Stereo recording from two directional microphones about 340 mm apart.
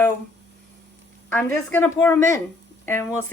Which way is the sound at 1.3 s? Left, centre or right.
Centre.